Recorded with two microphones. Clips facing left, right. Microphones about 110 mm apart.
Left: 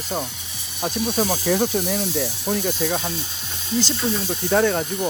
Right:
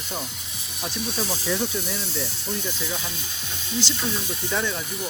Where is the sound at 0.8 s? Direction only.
45° left (ahead or behind); by 3.0 s 60° left (ahead or behind).